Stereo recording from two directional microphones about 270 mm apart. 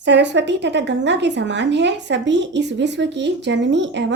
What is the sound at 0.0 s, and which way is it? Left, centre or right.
Speech, right.